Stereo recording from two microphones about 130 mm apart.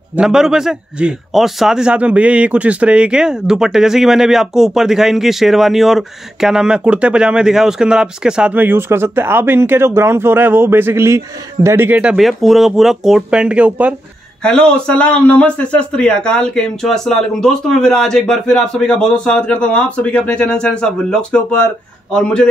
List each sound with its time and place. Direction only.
0.1 s a man's voice: 5° right (ahead or behind)
14.4 s a man's voice: 5° left (ahead or behind)